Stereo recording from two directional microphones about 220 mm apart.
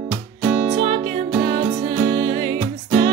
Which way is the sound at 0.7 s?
25° right (ahead or behind).